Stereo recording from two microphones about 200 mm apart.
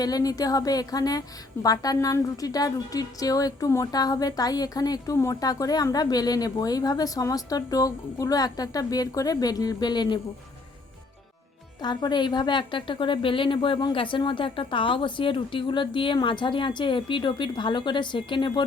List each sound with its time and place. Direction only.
0.0 s a woman's voice: 20° left (ahead or behind)
11.8 s a woman's voice: 20° left (ahead or behind)